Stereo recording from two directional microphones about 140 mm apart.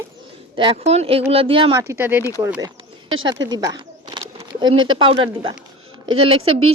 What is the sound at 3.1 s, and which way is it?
A woman's voice, 30° right (ahead or behind).